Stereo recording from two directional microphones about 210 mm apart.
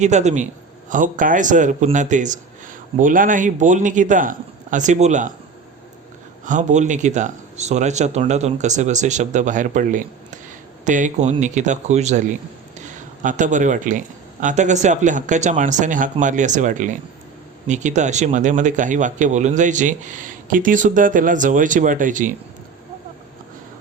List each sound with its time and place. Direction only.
0.0 s speech: 35° right (ahead or behind)
6.4 s speech: 35° right (ahead or behind)